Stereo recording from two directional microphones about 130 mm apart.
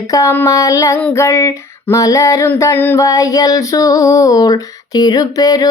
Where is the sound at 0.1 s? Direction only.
25° left (ahead or behind).